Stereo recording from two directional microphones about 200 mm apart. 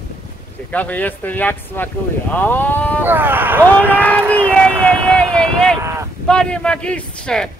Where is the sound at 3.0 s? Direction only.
10° right (ahead or behind).